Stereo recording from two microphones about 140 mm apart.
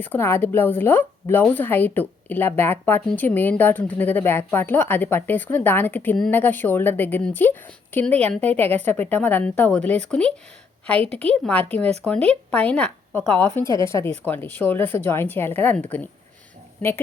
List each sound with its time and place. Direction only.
0.0 s a woman's voice: 15° left (ahead or behind)
13.4 s a woman's voice: 20° left (ahead or behind)